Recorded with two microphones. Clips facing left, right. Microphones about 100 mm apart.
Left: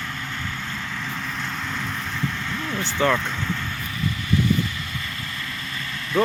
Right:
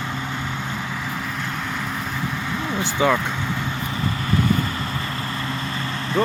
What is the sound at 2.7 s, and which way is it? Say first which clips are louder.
Speech: right 2 dB; 10° right (ahead or behind).